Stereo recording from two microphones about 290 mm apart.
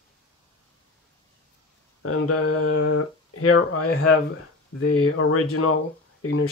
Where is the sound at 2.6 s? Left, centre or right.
Left.